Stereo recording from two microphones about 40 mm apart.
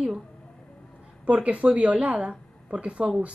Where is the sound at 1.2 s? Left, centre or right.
Right.